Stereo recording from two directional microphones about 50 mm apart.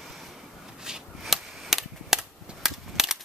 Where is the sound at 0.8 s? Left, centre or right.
Centre.